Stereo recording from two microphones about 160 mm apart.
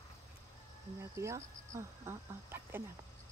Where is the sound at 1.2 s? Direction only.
15° right (ahead or behind).